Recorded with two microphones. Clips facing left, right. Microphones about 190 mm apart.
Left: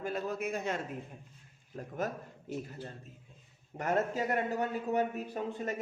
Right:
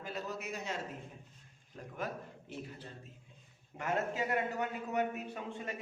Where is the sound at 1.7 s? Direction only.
50° left (ahead or behind).